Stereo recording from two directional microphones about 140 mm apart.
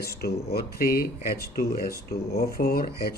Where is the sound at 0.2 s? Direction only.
90° left.